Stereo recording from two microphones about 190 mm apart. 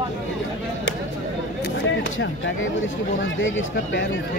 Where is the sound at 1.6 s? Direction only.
70° left (ahead or behind).